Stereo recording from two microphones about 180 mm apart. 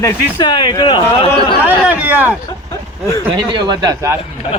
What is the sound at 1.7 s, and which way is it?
Speech, 10° right (ahead or behind).